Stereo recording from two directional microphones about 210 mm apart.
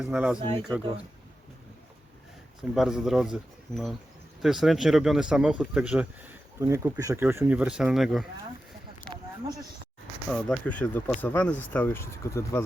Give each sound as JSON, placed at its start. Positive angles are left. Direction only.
{"t": 0.0, "sound": "speech", "side_deg": -5}
{"t": 0.7, "sound": "speech", "side_deg": -20}
{"t": 2.7, "sound": "speech", "side_deg": 0}
{"t": 4.4, "sound": "speech", "side_deg": 0}
{"t": 9.0, "sound": "a sound", "side_deg": -20}
{"t": 10.2, "sound": "speech", "side_deg": 0}